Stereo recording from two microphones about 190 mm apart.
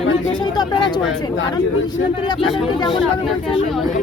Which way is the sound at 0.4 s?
20° left (ahead or behind).